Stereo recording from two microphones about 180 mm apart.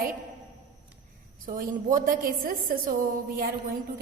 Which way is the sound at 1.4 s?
45° right (ahead or behind).